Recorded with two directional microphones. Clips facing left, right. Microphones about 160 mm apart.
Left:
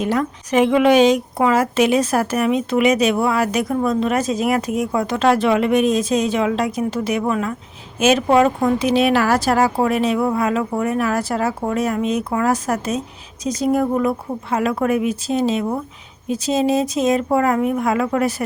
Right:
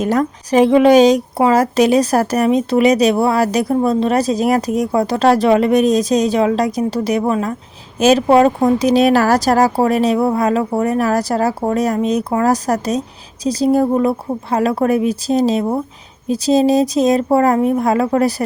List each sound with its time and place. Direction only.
0.0 s speech: 40° right (ahead or behind)